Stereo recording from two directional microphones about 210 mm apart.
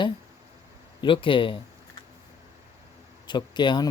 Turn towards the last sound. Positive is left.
turn(degrees=20)  # may be behind; listen again after turning